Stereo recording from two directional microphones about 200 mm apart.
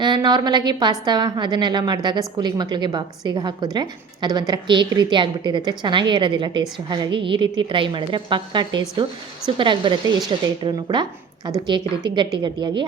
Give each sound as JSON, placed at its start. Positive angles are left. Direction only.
{"t": 0.0, "sound": "a woman's voice", "side_deg": -20}